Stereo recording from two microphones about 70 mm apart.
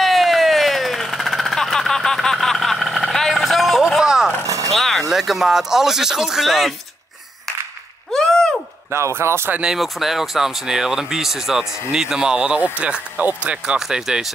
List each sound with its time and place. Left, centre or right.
0.0 s vehicle: centre
4.6 s a sound: centre
5.1 s speech: centre
8.1 s a sound: centre
8.9 s speech: right
9.8 s speech: centre
13.7 s speech: centre